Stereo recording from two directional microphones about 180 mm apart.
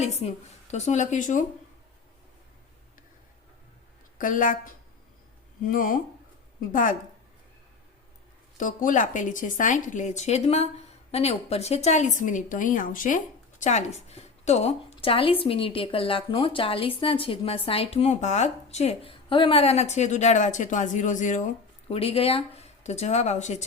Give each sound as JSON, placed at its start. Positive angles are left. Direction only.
{"t": 0.0, "sound": "speech", "side_deg": 35}
{"t": 4.2, "sound": "speech", "side_deg": 45}
{"t": 8.5, "sound": "speech", "side_deg": 45}
{"t": 21.8, "sound": "speech", "side_deg": 35}